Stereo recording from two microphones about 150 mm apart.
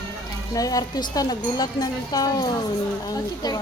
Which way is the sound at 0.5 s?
25° left (ahead or behind).